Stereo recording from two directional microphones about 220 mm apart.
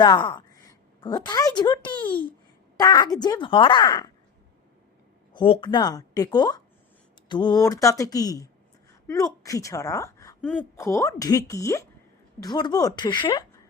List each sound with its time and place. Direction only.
0.0 s a woman's voice: 20° left (ahead or behind)
5.3 s a woman's voice: 20° left (ahead or behind)